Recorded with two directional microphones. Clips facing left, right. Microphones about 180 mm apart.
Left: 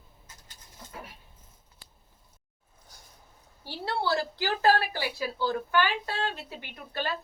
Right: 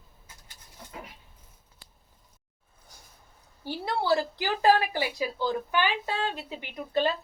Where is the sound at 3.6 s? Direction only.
15° right (ahead or behind).